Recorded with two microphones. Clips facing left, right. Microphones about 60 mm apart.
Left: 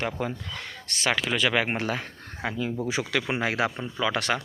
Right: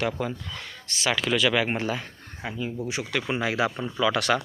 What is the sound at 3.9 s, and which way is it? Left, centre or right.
Speech, left.